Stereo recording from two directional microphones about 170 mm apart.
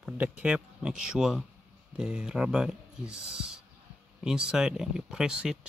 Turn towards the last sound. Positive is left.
turn(degrees=-5)  # may be behind; listen again after turning